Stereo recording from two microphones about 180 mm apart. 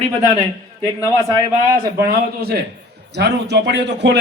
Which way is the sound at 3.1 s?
65° right (ahead or behind).